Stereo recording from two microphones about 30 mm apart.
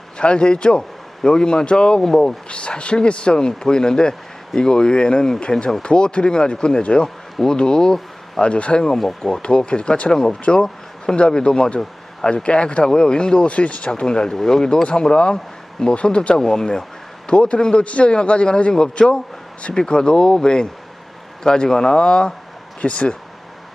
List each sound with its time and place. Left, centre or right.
0.2 s speech: left
5.5 s speech: centre
5.8 s speech: left
8.4 s speech: left
9.2 s speech: left
10.1 s speech: left
10.6 s a sound: left
11.3 s speech: left
16.4 s speech: left
17.2 s speech: left
19.7 s speech: left
22.8 s speech: left